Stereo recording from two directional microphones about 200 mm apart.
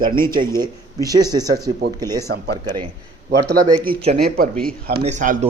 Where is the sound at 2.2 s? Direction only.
55° right (ahead or behind).